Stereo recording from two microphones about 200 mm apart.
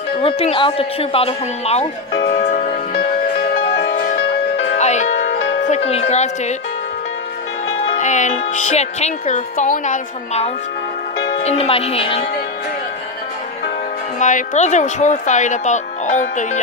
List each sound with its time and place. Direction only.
0.2 s speech: 30° left (ahead or behind)
2.3 s music: 35° left (ahead or behind)
3.5 s music: 55° left (ahead or behind)
4.2 s music: 65° left (ahead or behind)
4.7 s music: 35° left (ahead or behind)
5.3 s music: 65° left (ahead or behind)
5.7 s speech: 30° left (ahead or behind)
8.0 s speech: 35° left (ahead or behind)
14.2 s speech: 35° left (ahead or behind)